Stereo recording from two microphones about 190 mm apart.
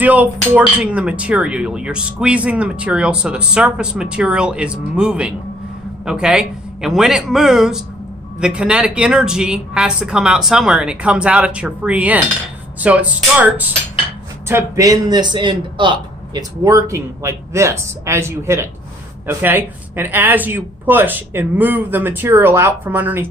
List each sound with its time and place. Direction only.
0.0 s a man's voice: 10° right (ahead or behind)